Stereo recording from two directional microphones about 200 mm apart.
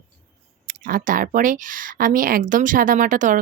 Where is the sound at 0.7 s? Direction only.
45° right (ahead or behind).